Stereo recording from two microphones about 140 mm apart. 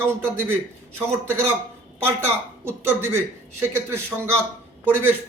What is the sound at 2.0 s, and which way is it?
A man's voice, 15° right (ahead or behind).